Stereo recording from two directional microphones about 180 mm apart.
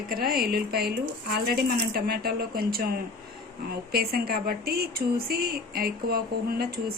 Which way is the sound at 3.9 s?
60° right (ahead or behind).